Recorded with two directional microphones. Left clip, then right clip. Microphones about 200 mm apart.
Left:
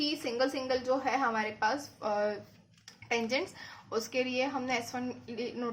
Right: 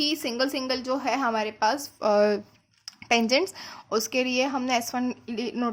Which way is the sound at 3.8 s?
55° right (ahead or behind).